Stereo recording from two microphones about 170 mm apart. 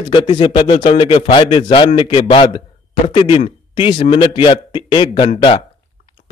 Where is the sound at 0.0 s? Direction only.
30° left (ahead or behind).